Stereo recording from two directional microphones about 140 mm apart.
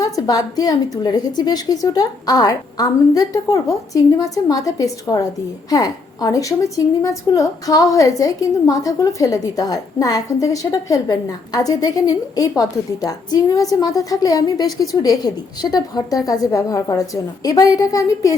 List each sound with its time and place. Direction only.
0.0 s a woman's voice: 25° left (ahead or behind)